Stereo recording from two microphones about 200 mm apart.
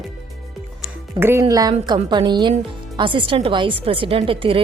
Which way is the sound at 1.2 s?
15° right (ahead or behind).